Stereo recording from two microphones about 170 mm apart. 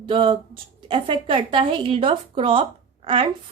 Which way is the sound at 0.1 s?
30° right (ahead or behind).